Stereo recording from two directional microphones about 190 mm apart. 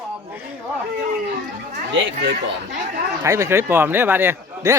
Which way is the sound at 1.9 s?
75° right (ahead or behind).